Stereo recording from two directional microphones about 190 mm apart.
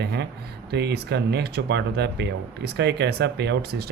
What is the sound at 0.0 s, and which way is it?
Speech, 60° right (ahead or behind).